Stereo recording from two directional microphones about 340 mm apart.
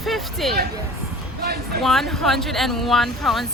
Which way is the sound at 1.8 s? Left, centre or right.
Centre.